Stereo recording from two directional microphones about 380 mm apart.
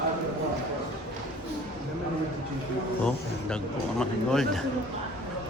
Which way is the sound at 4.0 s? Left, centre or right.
Centre.